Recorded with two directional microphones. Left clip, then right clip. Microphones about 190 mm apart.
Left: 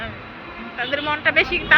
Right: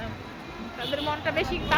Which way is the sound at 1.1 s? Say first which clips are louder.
Left 9 dB; 5° right (ahead or behind).